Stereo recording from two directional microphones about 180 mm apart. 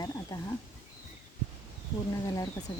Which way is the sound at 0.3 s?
20° left (ahead or behind).